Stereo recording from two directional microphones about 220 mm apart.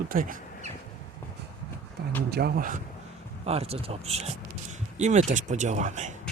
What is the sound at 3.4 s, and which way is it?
Speech, 25° right (ahead or behind).